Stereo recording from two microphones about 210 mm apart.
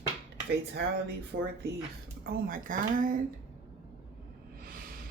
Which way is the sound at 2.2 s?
40° right (ahead or behind).